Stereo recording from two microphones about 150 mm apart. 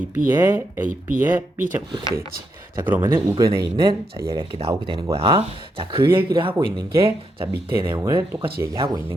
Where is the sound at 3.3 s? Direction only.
35° right (ahead or behind).